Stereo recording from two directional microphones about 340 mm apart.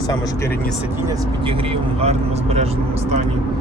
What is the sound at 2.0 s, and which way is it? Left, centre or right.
Speech, centre.